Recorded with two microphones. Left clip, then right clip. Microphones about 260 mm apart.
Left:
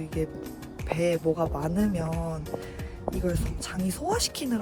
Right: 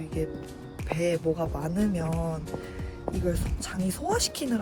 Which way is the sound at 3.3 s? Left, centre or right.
Centre.